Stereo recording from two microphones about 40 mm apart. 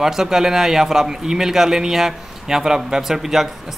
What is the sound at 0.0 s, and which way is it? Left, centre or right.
A man's voice, centre.